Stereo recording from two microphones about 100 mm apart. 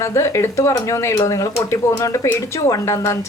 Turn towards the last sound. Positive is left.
turn(degrees=30)  # may be behind; listen again after turning